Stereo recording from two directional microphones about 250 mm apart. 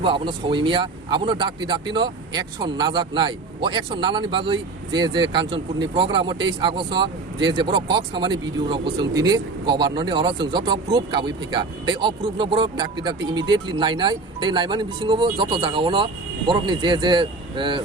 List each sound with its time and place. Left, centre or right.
0.0 s speech: centre